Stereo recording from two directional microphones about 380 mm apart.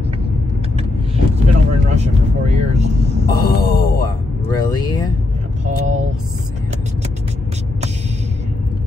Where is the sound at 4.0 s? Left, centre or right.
Centre.